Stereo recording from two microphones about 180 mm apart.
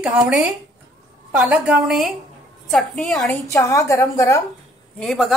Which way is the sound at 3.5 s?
15° left (ahead or behind).